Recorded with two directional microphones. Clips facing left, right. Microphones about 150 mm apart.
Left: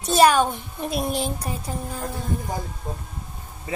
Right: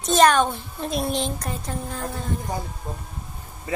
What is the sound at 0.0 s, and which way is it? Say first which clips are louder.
A woman's voice: even; 10° left (ahead or behind).